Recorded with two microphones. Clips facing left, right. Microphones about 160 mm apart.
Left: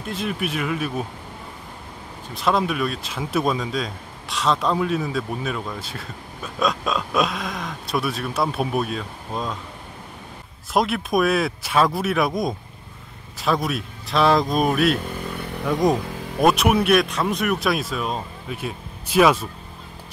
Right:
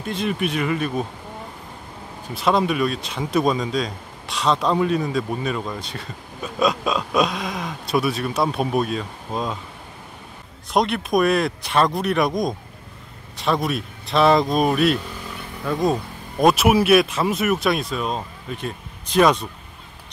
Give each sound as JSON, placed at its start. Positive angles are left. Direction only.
{"t": 0.0, "sound": "speech", "side_deg": 0}
{"t": 2.3, "sound": "speech", "side_deg": 0}
{"t": 10.7, "sound": "speech", "side_deg": 0}
{"t": 15.6, "sound": "speech", "side_deg": 15}
{"t": 16.3, "sound": "speech", "side_deg": 0}